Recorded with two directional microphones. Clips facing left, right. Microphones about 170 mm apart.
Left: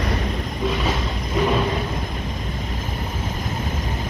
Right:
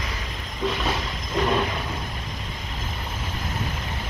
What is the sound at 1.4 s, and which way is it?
Vehicle, 10° left (ahead or behind).